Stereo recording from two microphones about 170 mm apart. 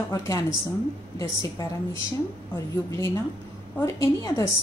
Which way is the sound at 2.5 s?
15° left (ahead or behind).